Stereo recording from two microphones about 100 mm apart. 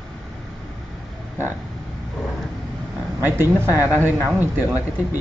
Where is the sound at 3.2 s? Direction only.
20° right (ahead or behind).